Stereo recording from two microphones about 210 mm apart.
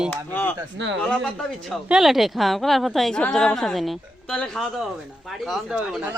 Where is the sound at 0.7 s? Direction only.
60° right (ahead or behind).